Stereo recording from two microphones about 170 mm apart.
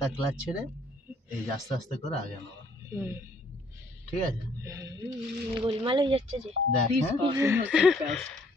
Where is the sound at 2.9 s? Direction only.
15° right (ahead or behind).